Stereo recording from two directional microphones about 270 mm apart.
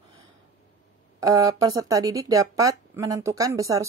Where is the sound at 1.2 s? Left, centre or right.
Centre.